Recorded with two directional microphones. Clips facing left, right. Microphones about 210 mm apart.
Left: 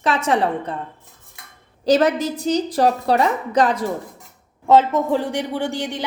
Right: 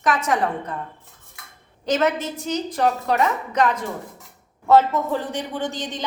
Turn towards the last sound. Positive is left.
turn(degrees=10)  # may be behind; listen again after turning